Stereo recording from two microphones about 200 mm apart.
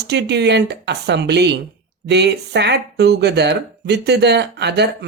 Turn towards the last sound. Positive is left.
turn(degrees=-55)  # may be behind; listen again after turning